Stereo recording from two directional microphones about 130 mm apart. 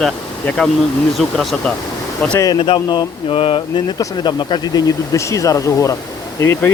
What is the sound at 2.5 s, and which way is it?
Speech, 40° left (ahead or behind).